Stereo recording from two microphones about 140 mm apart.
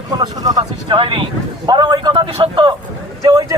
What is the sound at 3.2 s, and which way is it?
Speech, 25° right (ahead or behind).